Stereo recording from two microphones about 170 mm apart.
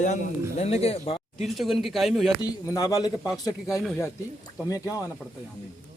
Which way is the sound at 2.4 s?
20° left (ahead or behind).